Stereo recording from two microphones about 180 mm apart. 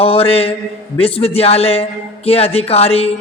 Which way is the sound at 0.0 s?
30° left (ahead or behind).